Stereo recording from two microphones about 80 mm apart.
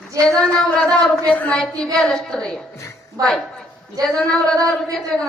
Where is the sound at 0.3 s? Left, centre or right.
Centre.